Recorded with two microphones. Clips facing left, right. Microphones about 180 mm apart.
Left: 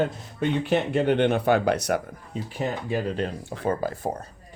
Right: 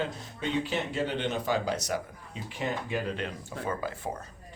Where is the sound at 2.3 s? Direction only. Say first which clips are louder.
Left 5 dB; 35° left (ahead or behind).